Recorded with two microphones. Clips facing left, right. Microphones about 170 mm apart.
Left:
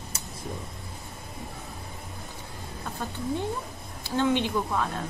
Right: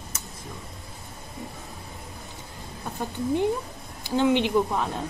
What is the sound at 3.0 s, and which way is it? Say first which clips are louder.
A woman's voice: right 6 dB; 15° right (ahead or behind).